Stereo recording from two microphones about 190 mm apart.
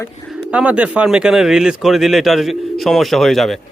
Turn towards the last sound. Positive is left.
turn(degrees=0)  # may be behind; listen again after turning